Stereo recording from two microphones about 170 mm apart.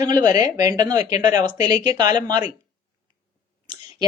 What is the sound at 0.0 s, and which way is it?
Speech, 25° right (ahead or behind).